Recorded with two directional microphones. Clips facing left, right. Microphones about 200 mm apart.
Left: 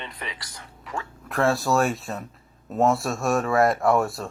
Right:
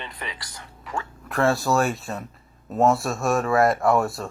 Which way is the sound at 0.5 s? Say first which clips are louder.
Right 1 dB; 35° left (ahead or behind).